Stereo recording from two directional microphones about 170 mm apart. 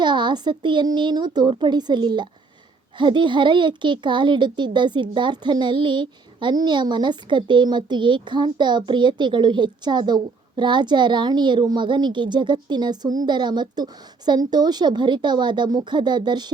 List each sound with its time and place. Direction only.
0.0 s a child's voice: 25° right (ahead or behind)